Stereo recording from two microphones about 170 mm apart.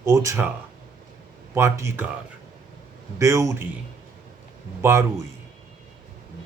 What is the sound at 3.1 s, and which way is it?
Speech, 15° right (ahead or behind).